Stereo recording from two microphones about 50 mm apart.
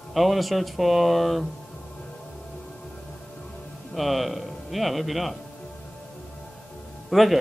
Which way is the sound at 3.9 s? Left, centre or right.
Centre.